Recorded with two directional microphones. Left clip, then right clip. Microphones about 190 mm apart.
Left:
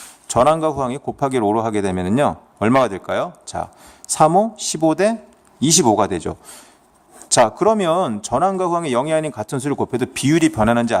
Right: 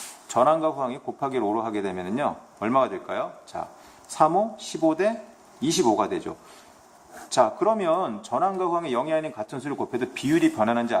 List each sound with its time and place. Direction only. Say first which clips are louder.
0.3 s speech: left 5 dB; 50° left (ahead or behind)